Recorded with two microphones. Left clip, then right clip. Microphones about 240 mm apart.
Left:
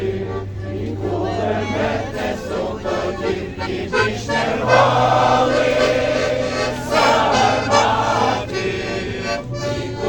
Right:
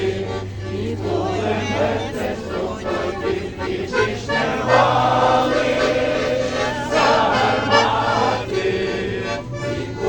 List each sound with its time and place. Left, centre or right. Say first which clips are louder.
2.9 s music: left 1 dB; left